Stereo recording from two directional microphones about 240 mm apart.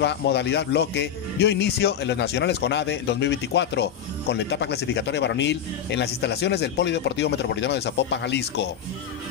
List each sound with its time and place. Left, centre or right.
0.0 s speech: left